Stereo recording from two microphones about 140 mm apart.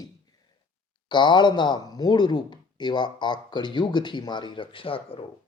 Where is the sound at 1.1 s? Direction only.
35° left (ahead or behind).